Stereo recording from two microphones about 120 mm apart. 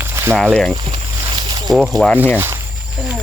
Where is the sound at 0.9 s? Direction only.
50° right (ahead or behind).